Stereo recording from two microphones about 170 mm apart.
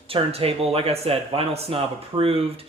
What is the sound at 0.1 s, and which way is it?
Speech, 35° right (ahead or behind).